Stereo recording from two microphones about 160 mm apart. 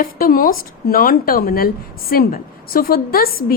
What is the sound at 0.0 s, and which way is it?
A woman's voice, 65° left (ahead or behind).